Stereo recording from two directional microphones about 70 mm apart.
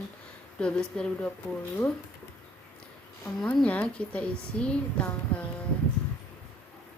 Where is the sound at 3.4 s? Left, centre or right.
Centre.